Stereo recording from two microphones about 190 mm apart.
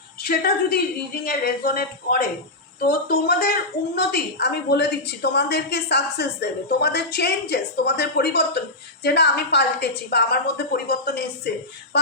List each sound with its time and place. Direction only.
0.2 s a woman's voice: 50° left (ahead or behind)